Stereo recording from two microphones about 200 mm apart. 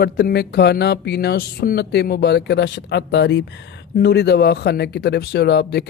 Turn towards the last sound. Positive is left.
turn(degrees=55)  # may be behind; listen again after turning